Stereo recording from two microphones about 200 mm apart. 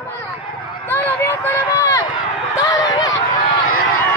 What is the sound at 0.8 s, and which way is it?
Run, 10° left (ahead or behind).